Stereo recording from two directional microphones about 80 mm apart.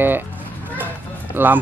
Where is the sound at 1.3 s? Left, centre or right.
Right.